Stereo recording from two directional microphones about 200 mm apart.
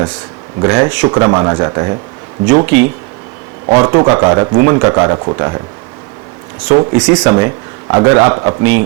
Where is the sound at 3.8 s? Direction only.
20° right (ahead or behind).